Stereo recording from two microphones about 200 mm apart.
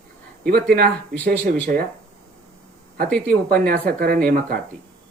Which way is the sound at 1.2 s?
45° right (ahead or behind).